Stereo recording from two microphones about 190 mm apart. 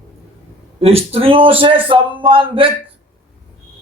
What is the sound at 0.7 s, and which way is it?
A man's voice, 30° right (ahead or behind).